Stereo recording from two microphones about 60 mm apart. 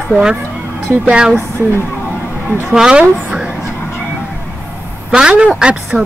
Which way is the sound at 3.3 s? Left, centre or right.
Centre.